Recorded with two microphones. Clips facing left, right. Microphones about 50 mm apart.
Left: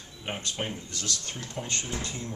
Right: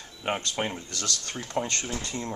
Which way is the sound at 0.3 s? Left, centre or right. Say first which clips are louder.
Right 4 dB; right.